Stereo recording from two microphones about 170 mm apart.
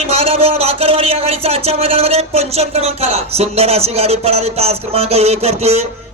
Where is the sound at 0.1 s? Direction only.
35° right (ahead or behind).